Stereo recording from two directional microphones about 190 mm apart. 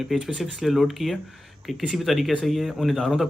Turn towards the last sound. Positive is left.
turn(degrees=0)  # may be behind; listen again after turning